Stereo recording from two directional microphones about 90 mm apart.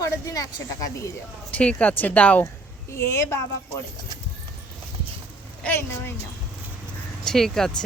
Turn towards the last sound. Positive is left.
turn(degrees=5)  # may be behind; listen again after turning